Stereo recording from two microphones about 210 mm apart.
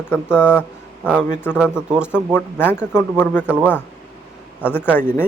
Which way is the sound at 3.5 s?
5° right (ahead or behind).